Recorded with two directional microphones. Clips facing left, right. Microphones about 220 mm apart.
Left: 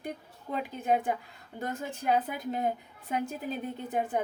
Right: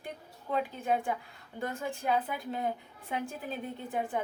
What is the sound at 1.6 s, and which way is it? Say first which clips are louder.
A woman's voice: even; 40° left (ahead or behind).